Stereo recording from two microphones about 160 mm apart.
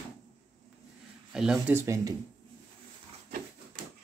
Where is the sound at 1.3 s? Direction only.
5° right (ahead or behind); by 2.2 s 20° right (ahead or behind).